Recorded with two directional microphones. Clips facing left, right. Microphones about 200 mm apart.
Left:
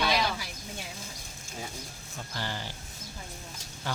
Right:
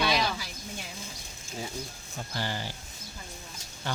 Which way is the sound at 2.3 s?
10° right (ahead or behind).